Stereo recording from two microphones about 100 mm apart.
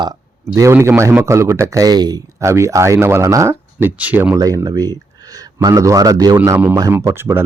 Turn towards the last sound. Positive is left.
turn(degrees=-25)  # may be behind; listen again after turning